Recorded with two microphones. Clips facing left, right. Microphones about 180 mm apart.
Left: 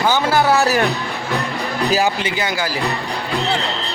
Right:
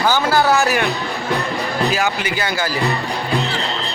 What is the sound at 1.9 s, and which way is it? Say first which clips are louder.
Speech: left 2 dB; 30° left (ahead or behind).